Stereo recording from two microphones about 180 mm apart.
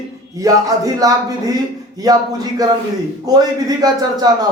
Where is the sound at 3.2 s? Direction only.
20° right (ahead or behind).